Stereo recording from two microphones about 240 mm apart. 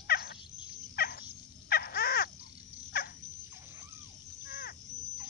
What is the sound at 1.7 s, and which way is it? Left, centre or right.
Crow, left.